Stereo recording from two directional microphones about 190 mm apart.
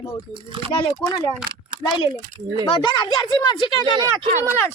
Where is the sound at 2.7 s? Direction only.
25° left (ahead or behind).